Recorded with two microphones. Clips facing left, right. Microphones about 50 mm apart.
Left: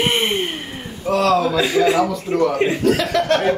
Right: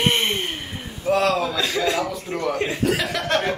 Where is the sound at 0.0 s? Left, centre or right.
Centre.